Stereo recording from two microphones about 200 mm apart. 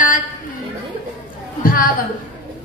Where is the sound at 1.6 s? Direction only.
45° left (ahead or behind).